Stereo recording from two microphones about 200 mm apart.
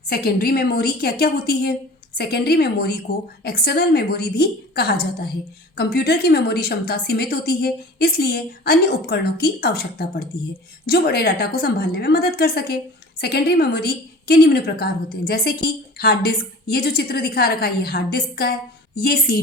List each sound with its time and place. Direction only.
0.1 s a woman's voice: 50° left (ahead or behind)